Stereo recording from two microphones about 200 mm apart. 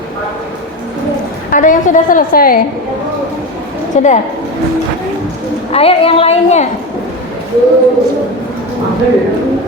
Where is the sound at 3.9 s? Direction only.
35° left (ahead or behind).